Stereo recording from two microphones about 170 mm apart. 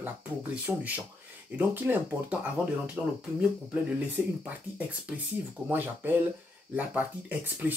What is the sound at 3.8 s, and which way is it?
Speech, 10° right (ahead or behind).